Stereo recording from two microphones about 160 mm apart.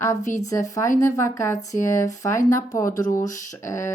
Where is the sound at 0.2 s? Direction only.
50° left (ahead or behind).